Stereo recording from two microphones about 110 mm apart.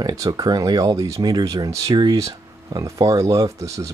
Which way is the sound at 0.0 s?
35° right (ahead or behind).